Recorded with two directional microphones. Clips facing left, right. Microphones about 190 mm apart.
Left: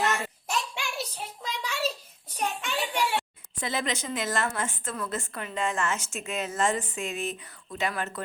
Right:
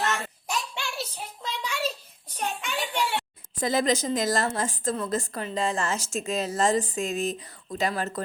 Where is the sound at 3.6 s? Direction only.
40° right (ahead or behind).